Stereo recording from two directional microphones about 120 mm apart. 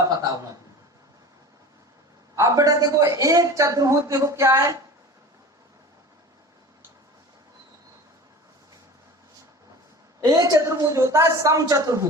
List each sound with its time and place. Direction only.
2.3 s a man's voice: 25° right (ahead or behind)
10.2 s a man's voice: 30° right (ahead or behind)